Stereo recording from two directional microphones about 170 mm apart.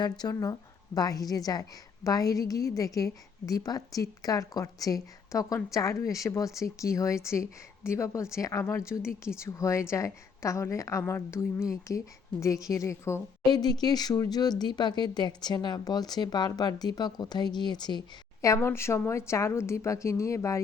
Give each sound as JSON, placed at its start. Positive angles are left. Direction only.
{"t": 0.0, "sound": "a woman's voice", "side_deg": 25}